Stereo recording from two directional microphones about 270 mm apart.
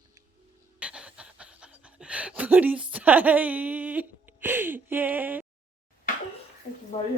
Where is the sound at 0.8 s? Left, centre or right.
Centre.